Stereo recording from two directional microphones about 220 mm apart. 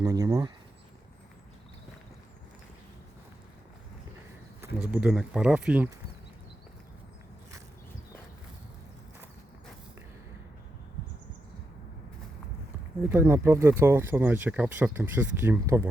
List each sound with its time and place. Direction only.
0.0 s speech: 15° right (ahead or behind)
4.6 s speech: 5° right (ahead or behind)
13.0 s speech: 10° right (ahead or behind)